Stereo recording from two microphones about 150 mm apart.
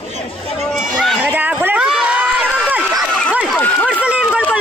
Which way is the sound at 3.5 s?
10° left (ahead or behind).